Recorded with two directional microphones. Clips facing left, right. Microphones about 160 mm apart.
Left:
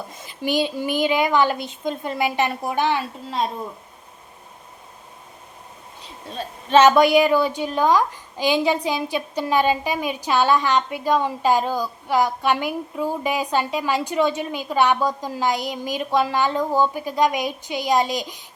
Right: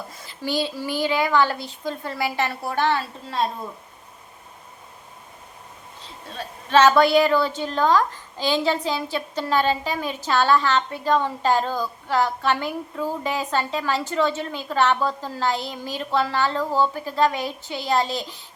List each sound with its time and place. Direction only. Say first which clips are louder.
0.1 s a woman's voice: left 4 dB; 20° left (ahead or behind)
6.2 s a woman's voice: left 3 dB; 20° left (ahead or behind)